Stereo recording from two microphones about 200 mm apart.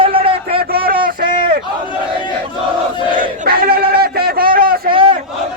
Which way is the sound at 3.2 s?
50° right (ahead or behind).